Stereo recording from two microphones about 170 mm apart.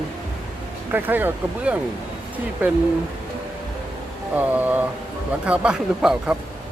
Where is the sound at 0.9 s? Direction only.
10° right (ahead or behind).